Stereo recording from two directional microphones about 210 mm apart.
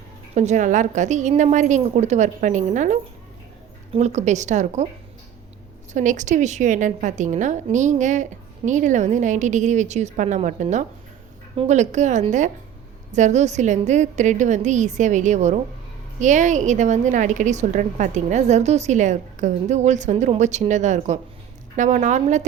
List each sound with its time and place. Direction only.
0.3 s a woman's voice: 35° right (ahead or behind)
5.9 s a woman's voice: 35° right (ahead or behind)